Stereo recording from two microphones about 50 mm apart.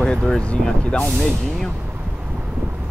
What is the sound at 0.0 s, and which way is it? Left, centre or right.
Speech, centre.